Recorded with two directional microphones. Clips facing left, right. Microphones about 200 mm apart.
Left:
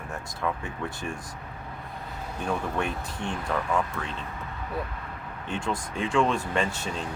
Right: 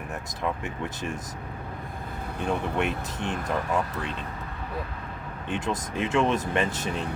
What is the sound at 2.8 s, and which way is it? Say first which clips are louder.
Speech: right 2 dB; 20° right (ahead or behind).